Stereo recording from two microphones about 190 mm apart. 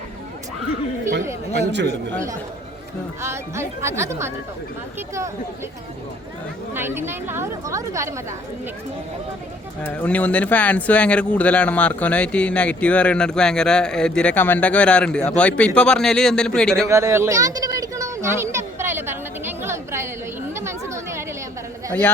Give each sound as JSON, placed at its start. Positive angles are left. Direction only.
{"t": 1.5, "sound": "a man's voice", "side_deg": -65}
{"t": 3.2, "sound": "speech", "side_deg": -15}
{"t": 6.7, "sound": "speech", "side_deg": -10}
{"t": 9.8, "sound": "speech", "side_deg": 10}
{"t": 16.9, "sound": "a sound", "side_deg": -15}
{"t": 20.5, "sound": "speech", "side_deg": -15}